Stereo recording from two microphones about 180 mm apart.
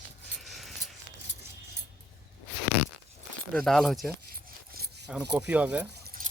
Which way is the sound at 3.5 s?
5° left (ahead or behind).